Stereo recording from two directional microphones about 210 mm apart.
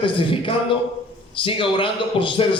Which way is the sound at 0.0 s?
25° left (ahead or behind).